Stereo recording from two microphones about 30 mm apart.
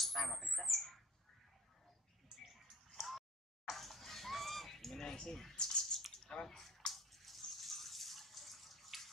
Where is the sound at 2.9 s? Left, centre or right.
Centre.